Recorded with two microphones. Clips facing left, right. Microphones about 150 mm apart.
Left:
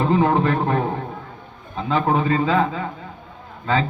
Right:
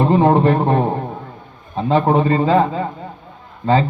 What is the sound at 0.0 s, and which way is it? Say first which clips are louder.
A man's voice: right 5 dB; 35° right (ahead or behind).